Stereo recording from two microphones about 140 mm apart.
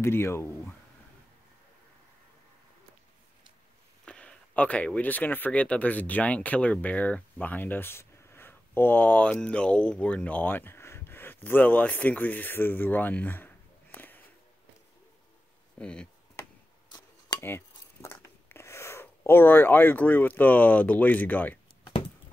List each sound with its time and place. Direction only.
0.0 s speech: 20° left (ahead or behind)
4.0 s speech: 5° left (ahead or behind)
13.9 s a sound: 15° left (ahead or behind)
15.8 s speech: 5° left (ahead or behind)
17.4 s speech: 15° left (ahead or behind)